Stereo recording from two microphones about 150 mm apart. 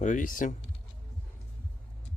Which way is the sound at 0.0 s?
60° left (ahead or behind).